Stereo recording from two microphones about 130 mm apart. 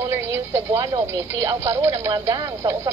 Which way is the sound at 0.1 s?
25° right (ahead or behind).